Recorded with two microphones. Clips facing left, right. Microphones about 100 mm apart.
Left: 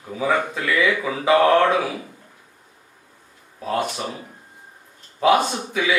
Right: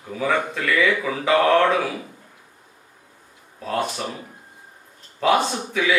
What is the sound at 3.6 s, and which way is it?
A man's voice, 15° left (ahead or behind).